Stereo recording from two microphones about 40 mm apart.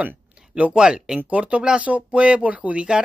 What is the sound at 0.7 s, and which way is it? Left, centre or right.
Speech, right.